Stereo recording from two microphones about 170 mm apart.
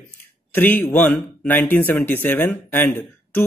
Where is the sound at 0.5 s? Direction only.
10° left (ahead or behind).